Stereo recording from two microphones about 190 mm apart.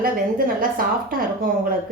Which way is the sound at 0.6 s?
50° right (ahead or behind).